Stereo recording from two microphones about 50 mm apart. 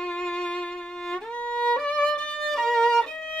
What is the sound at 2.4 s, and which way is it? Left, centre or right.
Violin, centre.